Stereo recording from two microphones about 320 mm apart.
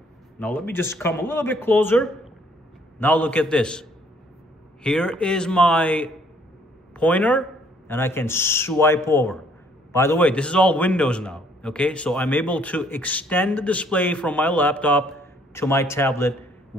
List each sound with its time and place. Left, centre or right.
0.4 s a man's voice: centre
4.8 s a man's voice: centre